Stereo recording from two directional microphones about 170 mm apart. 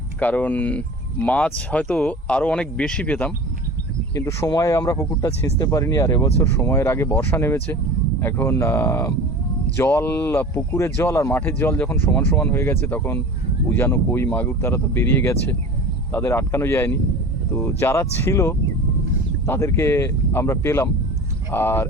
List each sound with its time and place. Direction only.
0.2 s speech: 10° left (ahead or behind)